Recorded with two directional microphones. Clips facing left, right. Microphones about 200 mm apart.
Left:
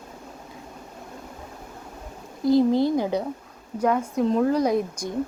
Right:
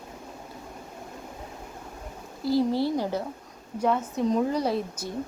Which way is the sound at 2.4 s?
20° left (ahead or behind).